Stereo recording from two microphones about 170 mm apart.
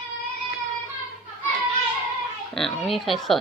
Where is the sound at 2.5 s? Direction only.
Centre (ahead or behind).